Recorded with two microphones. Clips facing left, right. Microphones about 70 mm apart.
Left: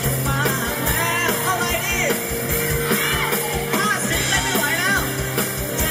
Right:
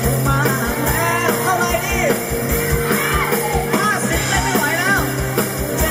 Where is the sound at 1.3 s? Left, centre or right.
Centre.